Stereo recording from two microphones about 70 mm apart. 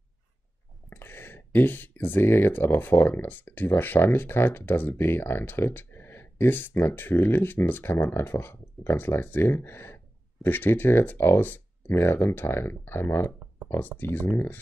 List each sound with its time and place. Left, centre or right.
0.8 s speech: left